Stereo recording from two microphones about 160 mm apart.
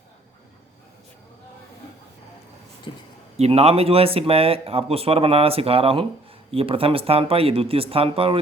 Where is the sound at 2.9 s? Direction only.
30° left (ahead or behind).